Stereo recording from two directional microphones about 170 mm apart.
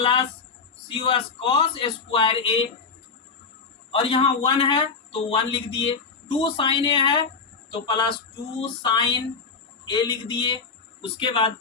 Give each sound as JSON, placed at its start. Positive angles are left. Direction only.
{"t": 0.0, "sound": "a man's voice", "side_deg": 30}
{"t": 3.9, "sound": "a man's voice", "side_deg": 30}